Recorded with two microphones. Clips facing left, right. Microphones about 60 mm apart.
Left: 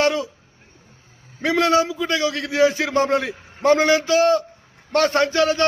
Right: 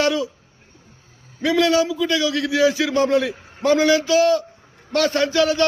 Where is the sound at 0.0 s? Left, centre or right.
Left.